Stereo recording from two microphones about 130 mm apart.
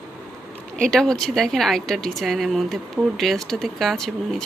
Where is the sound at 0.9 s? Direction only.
5° left (ahead or behind).